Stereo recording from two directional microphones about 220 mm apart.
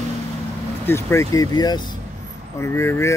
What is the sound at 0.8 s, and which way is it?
Speech, 10° left (ahead or behind).